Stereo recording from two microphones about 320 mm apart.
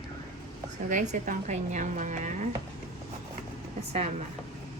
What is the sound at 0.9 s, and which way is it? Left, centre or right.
A woman's voice, right.